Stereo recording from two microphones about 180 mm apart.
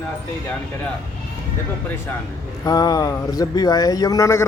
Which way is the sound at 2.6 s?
20° left (ahead or behind).